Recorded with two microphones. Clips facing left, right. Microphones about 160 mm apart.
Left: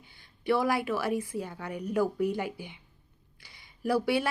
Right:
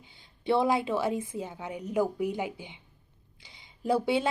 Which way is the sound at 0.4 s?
25° right (ahead or behind).